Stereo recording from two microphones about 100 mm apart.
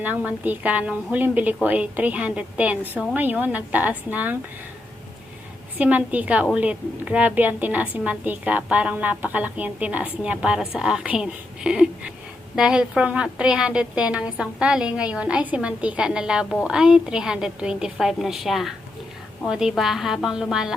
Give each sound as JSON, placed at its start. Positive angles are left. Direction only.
{"t": 0.0, "sound": "a woman's voice", "side_deg": -15}
{"t": 5.7, "sound": "a woman's voice", "side_deg": -15}